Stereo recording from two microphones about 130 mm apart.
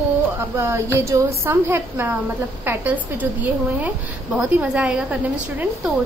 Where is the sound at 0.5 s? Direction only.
20° right (ahead or behind).